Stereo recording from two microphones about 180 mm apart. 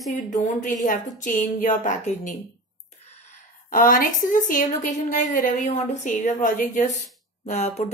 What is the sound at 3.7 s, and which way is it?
A woman's voice, 50° left (ahead or behind).